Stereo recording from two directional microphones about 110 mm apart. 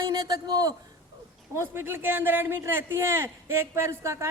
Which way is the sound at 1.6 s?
20° right (ahead or behind).